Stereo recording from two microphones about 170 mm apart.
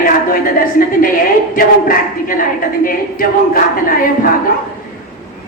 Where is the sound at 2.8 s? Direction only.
55° left (ahead or behind).